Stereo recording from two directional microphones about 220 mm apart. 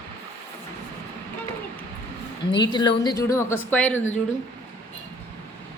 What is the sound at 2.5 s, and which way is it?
A woman's voice, 20° left (ahead or behind).